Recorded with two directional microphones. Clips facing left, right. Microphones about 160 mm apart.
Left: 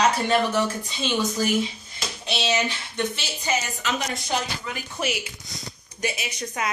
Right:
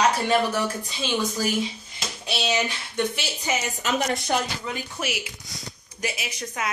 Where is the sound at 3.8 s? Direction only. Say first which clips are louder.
Right 3 dB; 45° right (ahead or behind).